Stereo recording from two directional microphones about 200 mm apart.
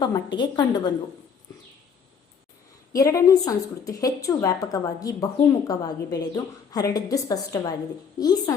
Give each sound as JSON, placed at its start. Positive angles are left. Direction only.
{"t": 0.3, "sound": "a woman's voice", "side_deg": 20}
{"t": 2.9, "sound": "a woman's voice", "side_deg": 15}